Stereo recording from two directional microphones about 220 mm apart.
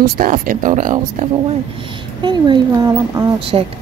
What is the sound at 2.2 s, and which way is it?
Speech, 20° right (ahead or behind).